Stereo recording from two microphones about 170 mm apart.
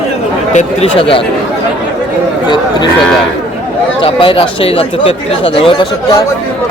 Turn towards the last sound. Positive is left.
turn(degrees=30)  # may be behind; listen again after turning